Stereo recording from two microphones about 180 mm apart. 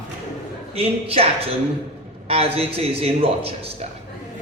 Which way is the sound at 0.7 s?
35° right (ahead or behind).